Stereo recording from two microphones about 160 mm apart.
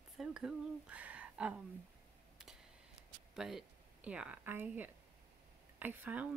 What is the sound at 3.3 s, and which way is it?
A woman's voice, centre (ahead or behind).